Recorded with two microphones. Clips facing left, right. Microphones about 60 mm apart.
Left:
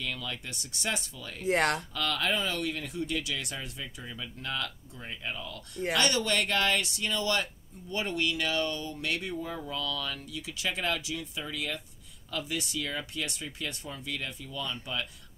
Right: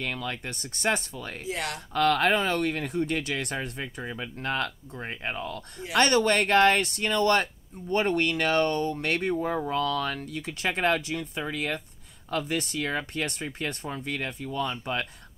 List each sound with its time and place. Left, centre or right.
0.0 s speech: right
1.4 s speech: left
2.0 s speech: right